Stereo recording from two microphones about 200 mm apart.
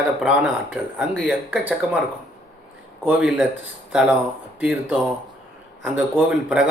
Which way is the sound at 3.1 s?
5° right (ahead or behind).